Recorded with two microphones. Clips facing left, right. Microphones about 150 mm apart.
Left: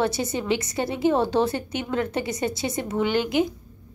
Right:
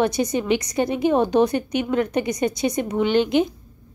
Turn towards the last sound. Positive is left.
turn(degrees=-20)  # may be behind; listen again after turning